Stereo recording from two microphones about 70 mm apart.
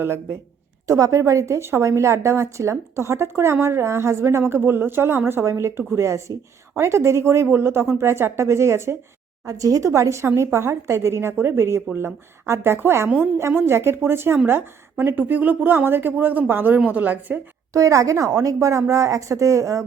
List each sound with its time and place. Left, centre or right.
0.9 s a woman's voice: right
9.5 s a woman's voice: right
17.7 s speech: right